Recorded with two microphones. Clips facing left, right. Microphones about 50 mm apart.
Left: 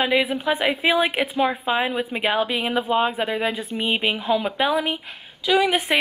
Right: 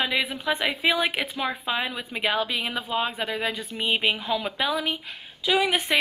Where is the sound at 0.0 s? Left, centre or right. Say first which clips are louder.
Left 5 dB; centre.